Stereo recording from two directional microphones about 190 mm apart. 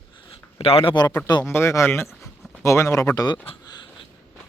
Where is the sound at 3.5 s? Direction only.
20° left (ahead or behind).